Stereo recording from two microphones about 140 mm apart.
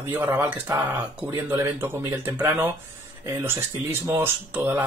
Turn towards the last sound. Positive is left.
turn(degrees=-15)  # may be behind; listen again after turning